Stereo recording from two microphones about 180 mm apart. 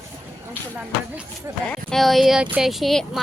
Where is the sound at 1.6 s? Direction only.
5° left (ahead or behind).